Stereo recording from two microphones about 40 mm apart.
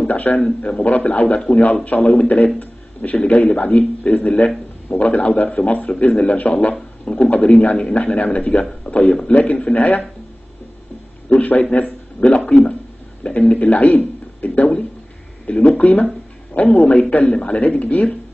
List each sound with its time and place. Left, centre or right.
0.1 s a man's voice: left
0.6 s a man's voice: left
11.2 s a sound: left
11.7 s a man's voice: left
13.6 s a man's voice: left